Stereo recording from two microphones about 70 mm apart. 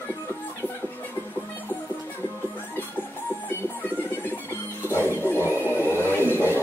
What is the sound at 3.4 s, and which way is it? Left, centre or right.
Music, left.